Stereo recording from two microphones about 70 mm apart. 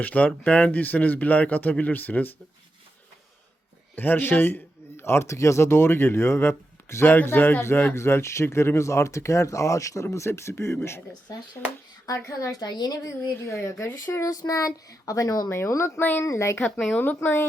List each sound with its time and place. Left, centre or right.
0.0 s speech: left
3.9 s speech: left
12.1 s speech: left
12.5 s a woman's voice: left
13.4 s speech: left
14.3 s speech: left
15.4 s speech: left
16.0 s speech: left
16.2 s speech: left